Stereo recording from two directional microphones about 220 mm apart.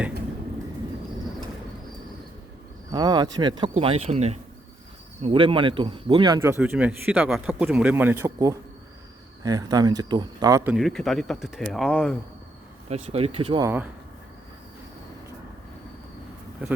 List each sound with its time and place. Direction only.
2.9 s speech: 20° right (ahead or behind)
10.8 s speech: centre (ahead or behind)
12.9 s speech: 25° right (ahead or behind)